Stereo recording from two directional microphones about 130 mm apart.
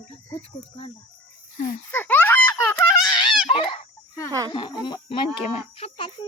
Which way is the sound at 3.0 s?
35° left (ahead or behind).